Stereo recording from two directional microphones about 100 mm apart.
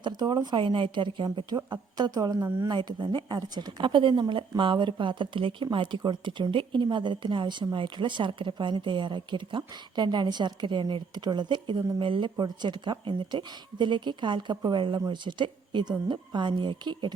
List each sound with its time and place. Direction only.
0.0 s a woman's voice: 45° right (ahead or behind)